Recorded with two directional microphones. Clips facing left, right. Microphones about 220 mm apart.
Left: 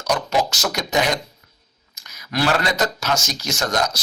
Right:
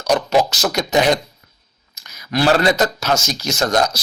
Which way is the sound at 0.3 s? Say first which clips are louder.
Right 5 dB; 30° right (ahead or behind).